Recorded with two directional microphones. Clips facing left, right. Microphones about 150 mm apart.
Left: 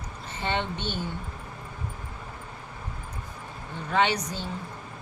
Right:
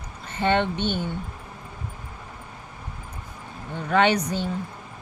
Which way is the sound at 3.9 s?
55° right (ahead or behind).